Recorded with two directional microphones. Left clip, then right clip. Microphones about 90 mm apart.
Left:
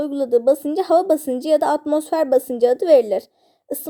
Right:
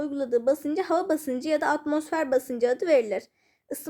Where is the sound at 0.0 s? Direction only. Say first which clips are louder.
Left 8 dB; 25° left (ahead or behind).